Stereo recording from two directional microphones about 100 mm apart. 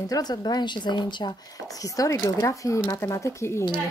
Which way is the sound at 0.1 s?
45° left (ahead or behind).